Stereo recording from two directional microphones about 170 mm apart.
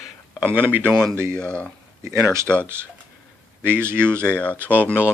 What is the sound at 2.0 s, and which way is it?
Speech, 15° right (ahead or behind).